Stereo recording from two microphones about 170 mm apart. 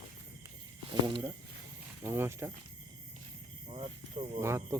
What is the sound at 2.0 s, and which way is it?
Speech, 15° right (ahead or behind).